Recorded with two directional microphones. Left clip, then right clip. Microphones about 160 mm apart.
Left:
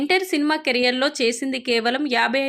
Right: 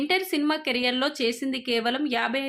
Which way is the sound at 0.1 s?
20° left (ahead or behind).